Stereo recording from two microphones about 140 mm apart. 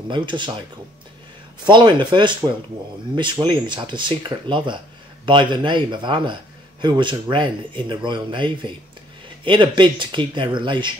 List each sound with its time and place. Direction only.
0.1 s speech: 35° right (ahead or behind)
1.7 s speech: 35° right (ahead or behind)